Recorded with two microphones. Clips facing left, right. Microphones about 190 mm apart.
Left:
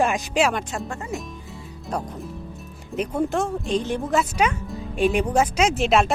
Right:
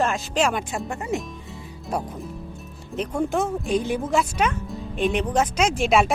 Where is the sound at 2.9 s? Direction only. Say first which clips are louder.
Left 1 dB; 5° left (ahead or behind).